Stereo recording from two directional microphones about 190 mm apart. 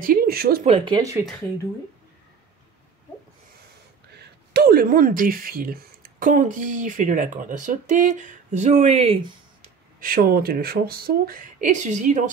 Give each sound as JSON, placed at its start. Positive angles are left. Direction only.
{"t": 0.0, "sound": "speech", "side_deg": -50}
{"t": 0.7, "sound": "speech", "side_deg": -25}
{"t": 4.1, "sound": "speech", "side_deg": -60}
{"t": 9.9, "sound": "speech", "side_deg": -50}